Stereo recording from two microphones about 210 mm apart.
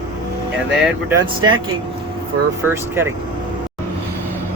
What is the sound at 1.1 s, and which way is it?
Speech, 15° right (ahead or behind).